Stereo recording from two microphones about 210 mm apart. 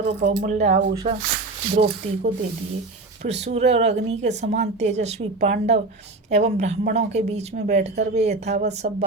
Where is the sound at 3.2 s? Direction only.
30° right (ahead or behind).